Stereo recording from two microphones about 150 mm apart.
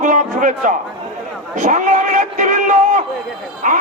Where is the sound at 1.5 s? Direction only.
55° right (ahead or behind).